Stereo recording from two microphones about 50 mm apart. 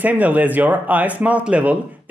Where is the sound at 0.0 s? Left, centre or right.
Right.